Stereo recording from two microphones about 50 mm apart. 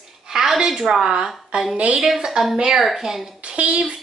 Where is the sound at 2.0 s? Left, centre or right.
Centre.